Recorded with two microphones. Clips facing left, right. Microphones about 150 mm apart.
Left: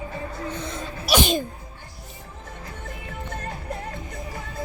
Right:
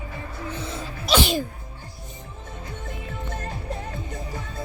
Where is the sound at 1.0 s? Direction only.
15° left (ahead or behind).